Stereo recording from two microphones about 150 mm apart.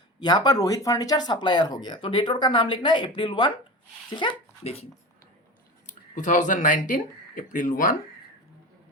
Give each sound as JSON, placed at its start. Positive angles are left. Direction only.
{"t": 0.2, "sound": "speech", "side_deg": 30}
{"t": 5.8, "sound": "speech", "side_deg": 55}